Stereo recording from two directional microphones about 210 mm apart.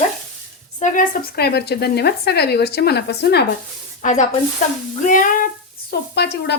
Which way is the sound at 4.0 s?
35° left (ahead or behind).